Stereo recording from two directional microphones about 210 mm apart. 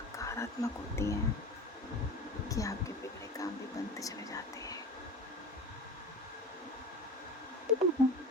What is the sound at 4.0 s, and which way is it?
Speech, 15° left (ahead or behind).